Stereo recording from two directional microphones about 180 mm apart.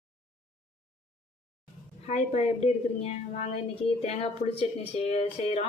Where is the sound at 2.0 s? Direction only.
35° left (ahead or behind).